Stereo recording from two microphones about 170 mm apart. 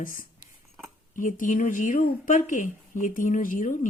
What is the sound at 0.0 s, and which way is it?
Speech, 55° left (ahead or behind).